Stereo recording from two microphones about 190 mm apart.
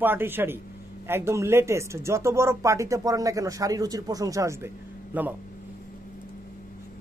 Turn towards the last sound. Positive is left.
turn(degrees=-10)  # may be behind; listen again after turning